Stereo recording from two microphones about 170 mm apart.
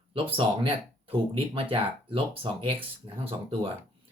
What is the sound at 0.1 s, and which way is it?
Speech, 30° right (ahead or behind).